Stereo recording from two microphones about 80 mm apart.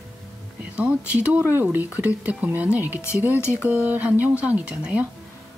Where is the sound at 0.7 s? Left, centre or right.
Centre.